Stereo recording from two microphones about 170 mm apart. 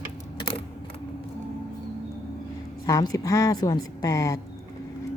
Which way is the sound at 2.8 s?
20° left (ahead or behind).